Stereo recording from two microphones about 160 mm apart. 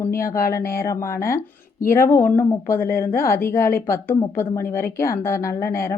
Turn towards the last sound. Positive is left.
turn(degrees=15)  # may be behind; listen again after turning